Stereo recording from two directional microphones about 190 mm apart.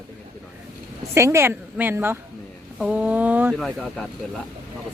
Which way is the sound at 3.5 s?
Centre (ahead or behind).